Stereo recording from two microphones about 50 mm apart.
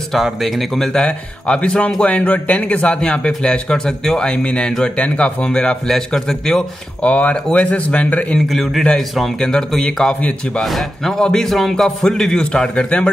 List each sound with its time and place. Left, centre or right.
0.1 s speech: centre
1.0 s a man's voice: left
7.0 s speech: left
8.5 s a man's voice: centre; by 13.1 s left